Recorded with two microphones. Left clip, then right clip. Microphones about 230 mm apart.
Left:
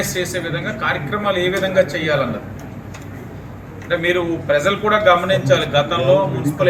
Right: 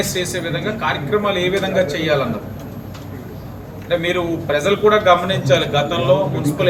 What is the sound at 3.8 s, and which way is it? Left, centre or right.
A man's voice, centre.